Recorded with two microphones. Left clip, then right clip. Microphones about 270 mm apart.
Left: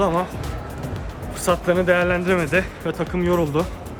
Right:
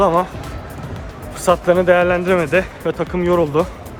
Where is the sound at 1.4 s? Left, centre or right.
Centre.